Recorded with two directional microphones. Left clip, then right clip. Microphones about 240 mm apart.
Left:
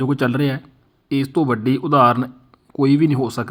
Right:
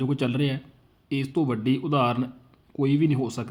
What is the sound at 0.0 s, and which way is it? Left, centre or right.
Speech, centre.